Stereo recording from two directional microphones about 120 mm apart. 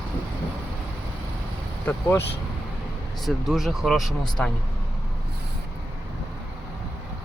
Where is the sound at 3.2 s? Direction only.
Centre (ahead or behind).